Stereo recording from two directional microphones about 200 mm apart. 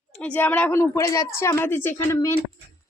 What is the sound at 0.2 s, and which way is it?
A woman's voice, 5° left (ahead or behind).